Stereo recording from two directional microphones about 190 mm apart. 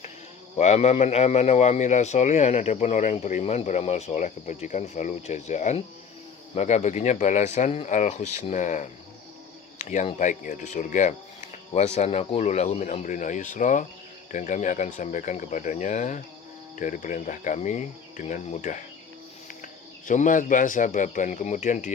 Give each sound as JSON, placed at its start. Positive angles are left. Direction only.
{"t": 0.5, "sound": "a man's voice", "side_deg": 35}